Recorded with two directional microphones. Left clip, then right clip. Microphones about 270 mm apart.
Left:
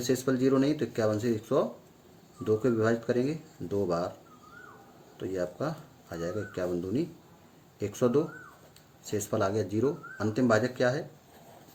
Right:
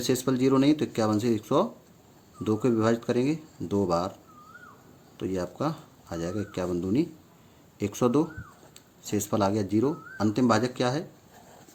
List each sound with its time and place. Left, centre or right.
0.0 s speech: right
5.3 s speech: right